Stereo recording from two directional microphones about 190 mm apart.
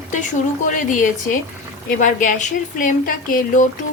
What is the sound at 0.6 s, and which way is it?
Speech, 45° left (ahead or behind).